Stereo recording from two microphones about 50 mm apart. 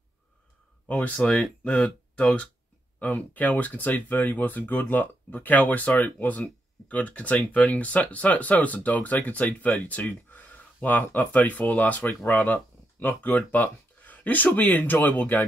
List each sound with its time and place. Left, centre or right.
0.8 s speech: left